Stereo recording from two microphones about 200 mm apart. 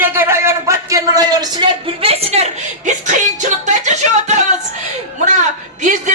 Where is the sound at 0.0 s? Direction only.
10° right (ahead or behind); by 4.4 s 35° right (ahead or behind).